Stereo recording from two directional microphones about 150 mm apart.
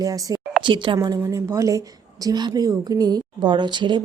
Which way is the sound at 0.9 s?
20° right (ahead or behind).